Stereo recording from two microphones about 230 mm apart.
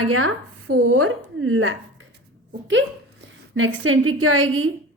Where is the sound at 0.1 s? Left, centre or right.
Right.